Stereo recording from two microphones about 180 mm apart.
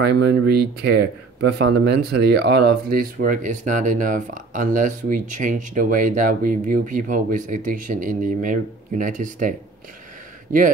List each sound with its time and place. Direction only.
0.0 s speech: 65° right (ahead or behind); by 9.6 s 45° right (ahead or behind)